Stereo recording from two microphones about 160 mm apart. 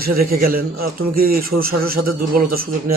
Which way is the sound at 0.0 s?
70° right (ahead or behind).